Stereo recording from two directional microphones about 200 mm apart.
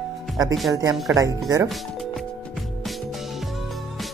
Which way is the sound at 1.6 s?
Centre (ahead or behind).